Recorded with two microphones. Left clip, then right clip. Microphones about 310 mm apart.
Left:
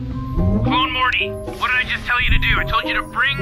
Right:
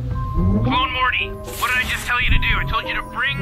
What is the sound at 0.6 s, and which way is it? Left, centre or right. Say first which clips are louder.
Speech: left 1 dB; centre.